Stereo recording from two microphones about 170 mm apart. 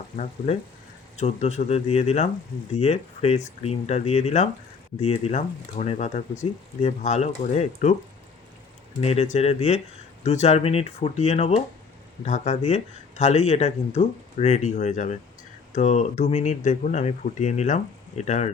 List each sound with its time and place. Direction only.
1.1 s speech: 40° left (ahead or behind)
9.0 s speech: 35° left (ahead or behind)